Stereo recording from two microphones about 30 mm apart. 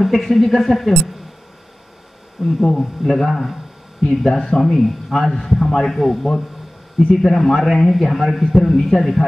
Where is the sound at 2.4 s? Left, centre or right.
Centre.